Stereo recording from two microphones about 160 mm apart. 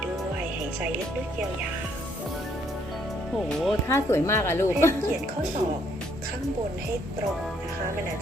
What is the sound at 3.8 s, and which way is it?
A woman's voice, 15° left (ahead or behind).